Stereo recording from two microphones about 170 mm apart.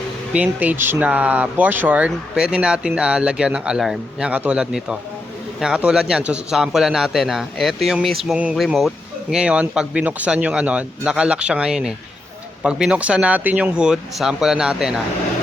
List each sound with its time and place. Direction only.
0.3 s a man's voice: 10° right (ahead or behind)